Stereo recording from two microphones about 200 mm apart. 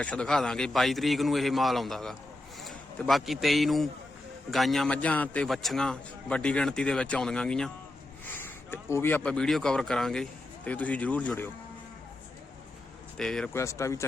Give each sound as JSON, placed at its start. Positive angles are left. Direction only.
{"t": 0.0, "sound": "a man's voice", "side_deg": 5}
{"t": 13.1, "sound": "speech", "side_deg": 5}